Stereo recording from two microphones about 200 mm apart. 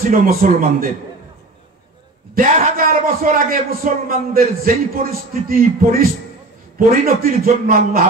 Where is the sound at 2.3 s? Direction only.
45° right (ahead or behind).